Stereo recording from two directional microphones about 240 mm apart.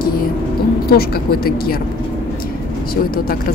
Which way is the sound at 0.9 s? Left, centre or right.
Left.